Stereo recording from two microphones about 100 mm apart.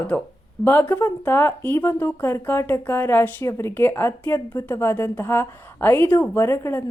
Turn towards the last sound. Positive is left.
turn(degrees=25)  # may be behind; listen again after turning